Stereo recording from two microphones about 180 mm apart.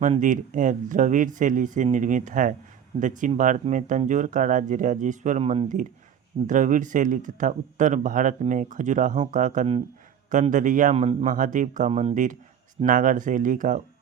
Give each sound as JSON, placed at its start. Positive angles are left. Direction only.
{"t": 0.2, "sound": "speech", "side_deg": -45}